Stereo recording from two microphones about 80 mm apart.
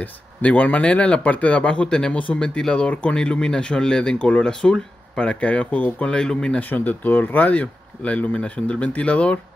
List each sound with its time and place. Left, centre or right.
0.4 s speech: centre
6.7 s speech: left